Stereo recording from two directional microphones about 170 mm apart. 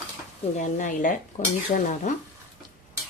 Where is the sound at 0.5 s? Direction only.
45° left (ahead or behind).